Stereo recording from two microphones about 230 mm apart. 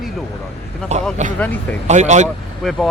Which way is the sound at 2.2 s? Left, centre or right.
Centre.